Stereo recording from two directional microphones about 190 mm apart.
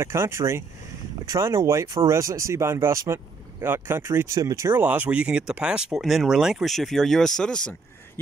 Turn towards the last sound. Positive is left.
turn(degrees=5)  # may be behind; listen again after turning